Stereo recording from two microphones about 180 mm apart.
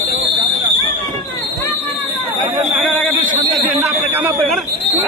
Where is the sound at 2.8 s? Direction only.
10° left (ahead or behind).